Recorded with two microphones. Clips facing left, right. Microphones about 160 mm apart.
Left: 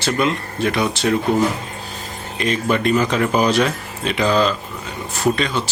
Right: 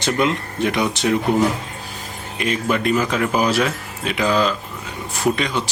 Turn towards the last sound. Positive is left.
turn(degrees=-15)  # may be behind; listen again after turning